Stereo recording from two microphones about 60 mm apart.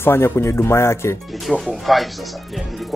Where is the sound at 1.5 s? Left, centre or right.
Centre.